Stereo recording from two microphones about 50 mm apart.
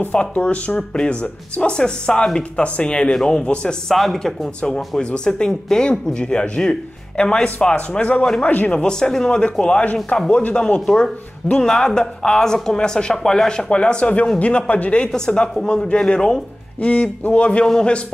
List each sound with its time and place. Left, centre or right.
0.1 s speech: left
0.7 s speech: centre
3.9 s speech: centre
4.6 s a man's voice: centre; by 8.7 s left
8.7 s speech: centre
15.0 s speech: centre